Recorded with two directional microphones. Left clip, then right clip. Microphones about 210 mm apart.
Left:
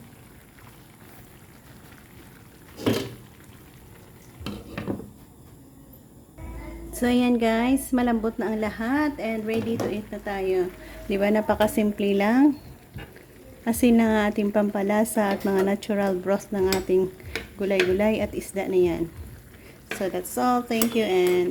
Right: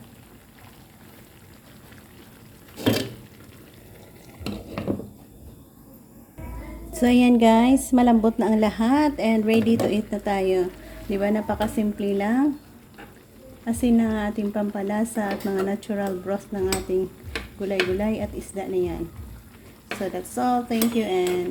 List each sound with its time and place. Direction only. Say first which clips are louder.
6.9 s a woman's voice: right 4 dB; 5° right (ahead or behind)
11.1 s dishes: left 2 dB; 15° left (ahead or behind)
13.7 s speech: left 2 dB; 20° left (ahead or behind)
20.0 s dishes: left 1 dB; 15° left (ahead or behind)